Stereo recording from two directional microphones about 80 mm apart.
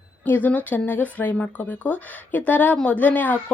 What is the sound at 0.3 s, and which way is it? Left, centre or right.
Speech, left.